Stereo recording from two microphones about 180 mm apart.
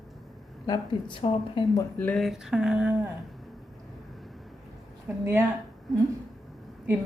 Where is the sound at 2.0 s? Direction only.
5° left (ahead or behind).